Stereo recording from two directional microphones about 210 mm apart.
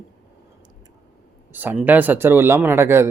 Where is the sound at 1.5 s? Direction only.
10° right (ahead or behind).